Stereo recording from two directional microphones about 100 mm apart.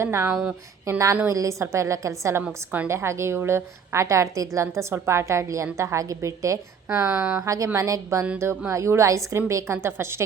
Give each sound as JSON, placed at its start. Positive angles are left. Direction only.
{"t": 0.0, "sound": "a woman's voice", "side_deg": -25}
{"t": 6.8, "sound": "speech", "side_deg": -10}
{"t": 7.4, "sound": "a woman's voice", "side_deg": -30}